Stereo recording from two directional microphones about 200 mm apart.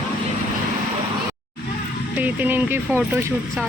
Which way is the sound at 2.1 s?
10° right (ahead or behind).